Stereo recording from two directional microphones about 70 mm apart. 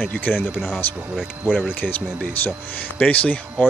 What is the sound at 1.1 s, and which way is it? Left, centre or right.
Speech, centre.